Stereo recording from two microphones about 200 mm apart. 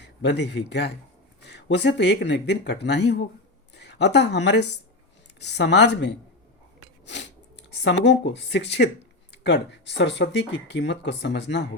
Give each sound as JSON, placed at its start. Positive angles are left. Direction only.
{"t": 0.0, "sound": "a woman's voice", "side_deg": 60}
{"t": 7.0, "sound": "a sound", "side_deg": 60}
{"t": 7.7, "sound": "speech", "side_deg": 60}